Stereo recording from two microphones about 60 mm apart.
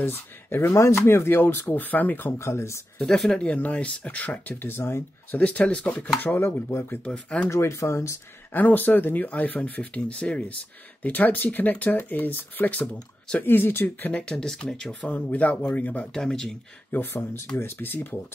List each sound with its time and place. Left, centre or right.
0.0 s speech: left
3.3 s speech: left
5.3 s speech: left
6.7 s speech: left
7.1 s speech: centre
7.4 s speech: left
8.5 s speech: left
14.1 s speech: centre
15.0 s speech: left
16.1 s speech: centre
16.9 s speech: left